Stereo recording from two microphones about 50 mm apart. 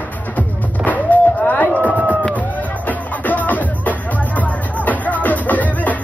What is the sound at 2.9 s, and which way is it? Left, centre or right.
Music, left.